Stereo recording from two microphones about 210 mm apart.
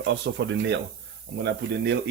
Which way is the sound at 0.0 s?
55° right (ahead or behind).